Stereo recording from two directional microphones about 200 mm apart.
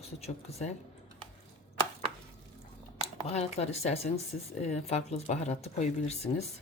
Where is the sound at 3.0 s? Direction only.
30° left (ahead or behind).